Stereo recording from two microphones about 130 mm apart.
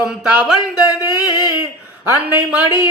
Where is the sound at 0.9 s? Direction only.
30° left (ahead or behind).